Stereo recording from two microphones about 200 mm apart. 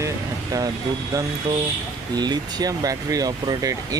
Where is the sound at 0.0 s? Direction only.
20° right (ahead or behind).